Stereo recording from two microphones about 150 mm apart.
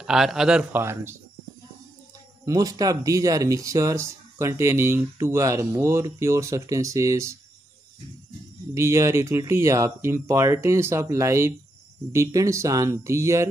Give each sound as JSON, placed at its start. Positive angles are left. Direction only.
{"t": 0.0, "sound": "speech", "side_deg": -5}
{"t": 2.4, "sound": "speech", "side_deg": -25}
{"t": 8.7, "sound": "speech", "side_deg": -20}